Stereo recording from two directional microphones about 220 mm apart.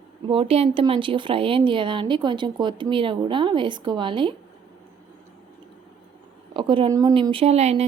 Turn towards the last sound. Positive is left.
turn(degrees=-30)  # may be behind; listen again after turning